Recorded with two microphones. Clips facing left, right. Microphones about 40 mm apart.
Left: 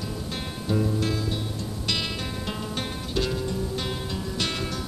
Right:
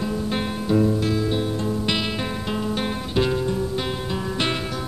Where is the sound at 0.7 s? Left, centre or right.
Centre.